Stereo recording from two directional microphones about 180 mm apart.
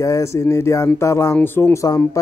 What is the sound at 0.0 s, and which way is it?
Speech, 15° left (ahead or behind).